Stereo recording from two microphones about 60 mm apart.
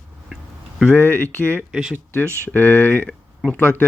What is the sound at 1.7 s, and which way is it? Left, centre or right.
Speech, centre.